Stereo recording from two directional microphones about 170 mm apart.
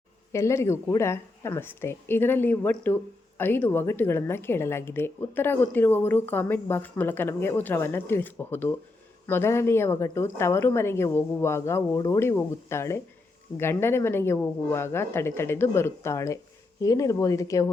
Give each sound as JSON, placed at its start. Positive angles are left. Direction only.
{"t": 0.3, "sound": "a woman's voice", "side_deg": 15}